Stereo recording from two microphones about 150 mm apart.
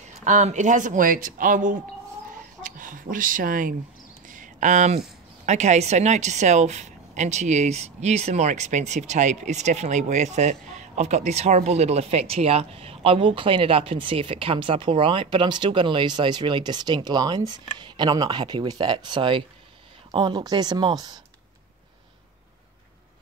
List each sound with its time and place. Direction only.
0.2 s speech: 50° right (ahead or behind); by 21.2 s 25° right (ahead or behind)